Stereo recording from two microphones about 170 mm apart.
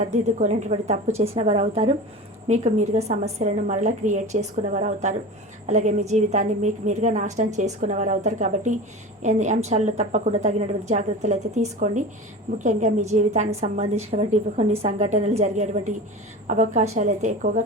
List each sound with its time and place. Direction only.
0.0 s a woman's voice: 45° right (ahead or behind)